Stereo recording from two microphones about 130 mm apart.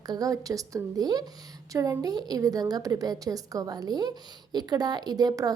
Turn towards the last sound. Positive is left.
turn(degrees=-30)  # may be behind; listen again after turning